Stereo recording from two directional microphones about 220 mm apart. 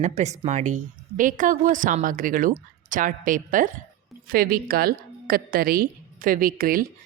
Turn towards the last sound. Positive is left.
turn(degrees=-40)  # may be behind; listen again after turning